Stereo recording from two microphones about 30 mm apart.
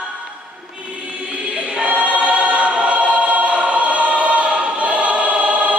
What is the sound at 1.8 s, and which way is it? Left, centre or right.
Choir, right.